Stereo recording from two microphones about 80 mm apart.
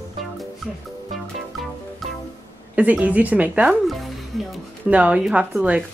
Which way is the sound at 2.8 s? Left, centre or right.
Centre.